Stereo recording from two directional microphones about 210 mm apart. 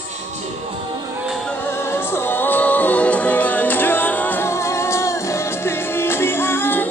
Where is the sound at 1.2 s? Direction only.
Centre (ahead or behind).